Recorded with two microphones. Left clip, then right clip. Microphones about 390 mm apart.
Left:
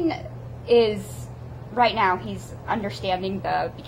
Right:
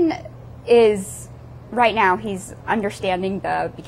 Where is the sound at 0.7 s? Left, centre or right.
Right.